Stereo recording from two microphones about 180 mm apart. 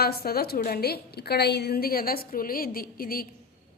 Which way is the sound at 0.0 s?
60° left (ahead or behind).